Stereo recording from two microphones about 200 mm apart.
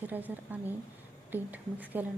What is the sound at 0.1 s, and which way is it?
A woman's voice, 10° right (ahead or behind).